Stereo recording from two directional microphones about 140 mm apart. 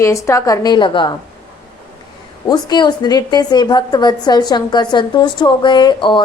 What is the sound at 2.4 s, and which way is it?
A woman's voice, 30° left (ahead or behind).